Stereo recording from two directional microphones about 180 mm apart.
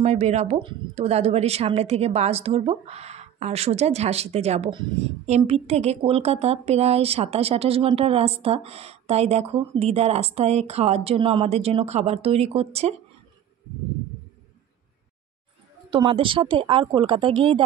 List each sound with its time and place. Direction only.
0.0 s speech: 40° right (ahead or behind)
15.9 s a woman's voice: 30° right (ahead or behind)